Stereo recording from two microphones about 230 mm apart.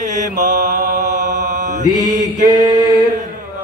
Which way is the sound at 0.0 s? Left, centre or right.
Right.